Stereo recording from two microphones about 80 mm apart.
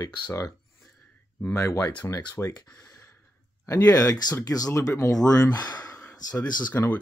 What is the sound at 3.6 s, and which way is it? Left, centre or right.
Speech, left.